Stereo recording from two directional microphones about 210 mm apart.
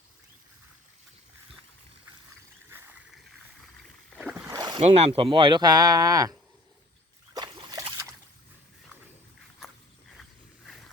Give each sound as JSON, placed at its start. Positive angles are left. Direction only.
{"t": 3.8, "sound": "boat", "side_deg": 0}
{"t": 4.4, "sound": "boat", "side_deg": -20}
{"t": 4.8, "sound": "speech", "side_deg": -30}
{"t": 7.3, "sound": "a sound", "side_deg": -20}